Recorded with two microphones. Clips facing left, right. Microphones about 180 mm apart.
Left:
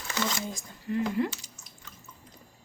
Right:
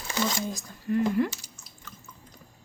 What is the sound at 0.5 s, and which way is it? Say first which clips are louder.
Speech: right 4 dB; 50° right (ahead or behind).